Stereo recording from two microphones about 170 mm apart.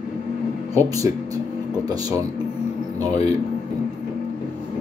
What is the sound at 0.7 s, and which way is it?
Speech, 20° right (ahead or behind).